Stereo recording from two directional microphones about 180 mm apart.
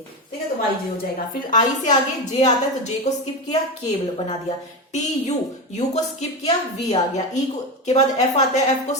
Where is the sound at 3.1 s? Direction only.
40° left (ahead or behind).